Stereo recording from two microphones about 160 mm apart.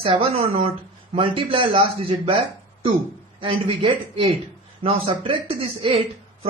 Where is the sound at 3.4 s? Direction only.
35° right (ahead or behind).